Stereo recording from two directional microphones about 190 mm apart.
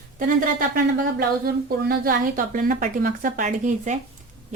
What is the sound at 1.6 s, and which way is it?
A woman's voice, 50° right (ahead or behind).